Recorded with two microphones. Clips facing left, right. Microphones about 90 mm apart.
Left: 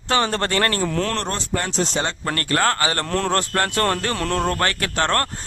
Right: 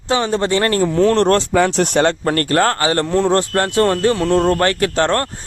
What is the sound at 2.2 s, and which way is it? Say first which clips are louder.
Speech: right 5 dB; 35° right (ahead or behind).